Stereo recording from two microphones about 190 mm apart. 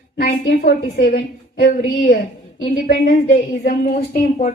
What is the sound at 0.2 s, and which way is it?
A woman's voice, 55° left (ahead or behind).